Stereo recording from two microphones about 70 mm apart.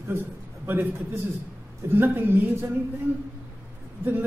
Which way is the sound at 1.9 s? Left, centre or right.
Right.